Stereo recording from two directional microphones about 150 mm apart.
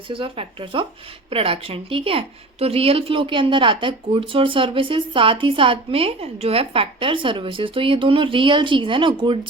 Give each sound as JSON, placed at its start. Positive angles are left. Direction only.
{"t": 0.1, "sound": "a woman's voice", "side_deg": -35}